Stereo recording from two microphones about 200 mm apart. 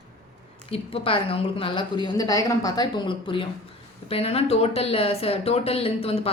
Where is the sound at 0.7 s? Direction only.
25° left (ahead or behind).